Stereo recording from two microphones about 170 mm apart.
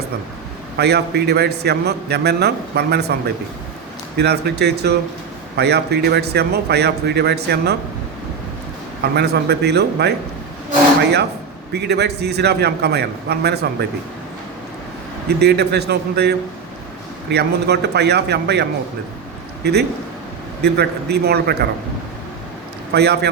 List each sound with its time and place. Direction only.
0.8 s a man's voice: 75° right (ahead or behind)
9.1 s a man's voice: 75° right (ahead or behind)
11.7 s a man's voice: 75° right (ahead or behind)
15.4 s a man's voice: 75° right (ahead or behind)
20.6 s a man's voice: 75° right (ahead or behind)
22.9 s a man's voice: 75° right (ahead or behind)